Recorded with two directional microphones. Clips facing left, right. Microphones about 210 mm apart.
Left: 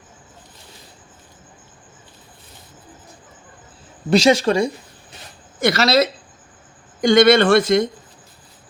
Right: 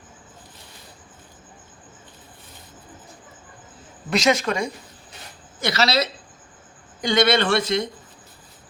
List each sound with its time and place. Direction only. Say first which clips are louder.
4.1 s a woman's voice: left 6 dB; 30° left (ahead or behind)
5.5 s speech: left 6 dB; 50° left (ahead or behind)